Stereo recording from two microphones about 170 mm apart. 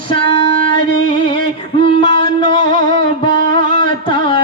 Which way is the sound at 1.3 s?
30° left (ahead or behind).